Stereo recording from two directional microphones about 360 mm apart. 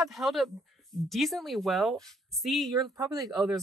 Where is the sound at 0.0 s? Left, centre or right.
Centre.